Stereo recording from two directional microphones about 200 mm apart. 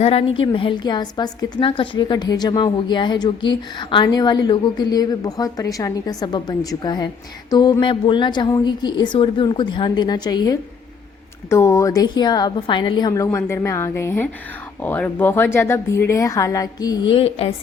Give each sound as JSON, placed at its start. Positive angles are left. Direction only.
{"t": 0.0, "sound": "a woman's voice", "side_deg": 30}